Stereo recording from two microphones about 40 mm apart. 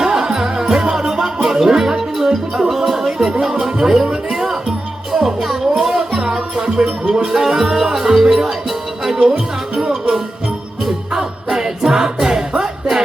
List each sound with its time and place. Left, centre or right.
0.0 s music: right
7.0 s music: right
7.3 s music: centre
10.8 s music: centre